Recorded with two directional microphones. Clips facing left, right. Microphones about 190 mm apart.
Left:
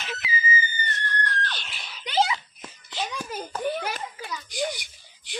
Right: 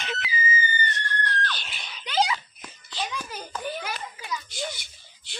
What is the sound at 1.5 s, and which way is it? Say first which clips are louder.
Screaming: even; centre (ahead or behind).